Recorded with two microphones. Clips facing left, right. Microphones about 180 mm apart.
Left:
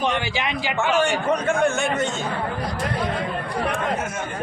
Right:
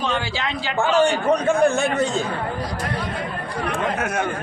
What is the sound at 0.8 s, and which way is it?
A man's voice, 35° right (ahead or behind).